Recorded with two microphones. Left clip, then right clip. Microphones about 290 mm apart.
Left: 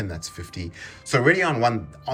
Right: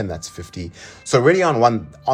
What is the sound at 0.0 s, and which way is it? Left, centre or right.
Speech, centre.